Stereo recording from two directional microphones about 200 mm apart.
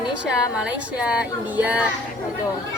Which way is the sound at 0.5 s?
5° right (ahead or behind).